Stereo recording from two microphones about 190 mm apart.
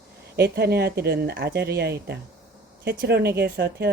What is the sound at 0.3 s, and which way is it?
Speech, 55° right (ahead or behind).